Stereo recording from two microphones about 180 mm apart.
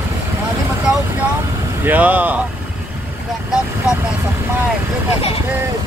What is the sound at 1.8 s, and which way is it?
Speech, 10° right (ahead or behind).